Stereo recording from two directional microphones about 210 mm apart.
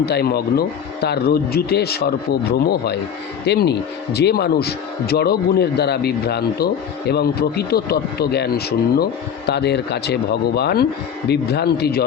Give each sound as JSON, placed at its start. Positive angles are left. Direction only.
{"t": 0.0, "sound": "speech", "side_deg": 50}